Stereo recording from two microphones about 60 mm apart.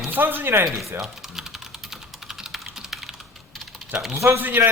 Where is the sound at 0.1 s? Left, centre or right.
Right.